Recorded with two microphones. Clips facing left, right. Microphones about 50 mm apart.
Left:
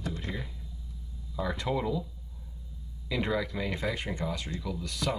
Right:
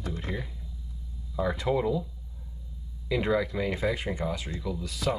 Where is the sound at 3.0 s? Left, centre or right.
Centre.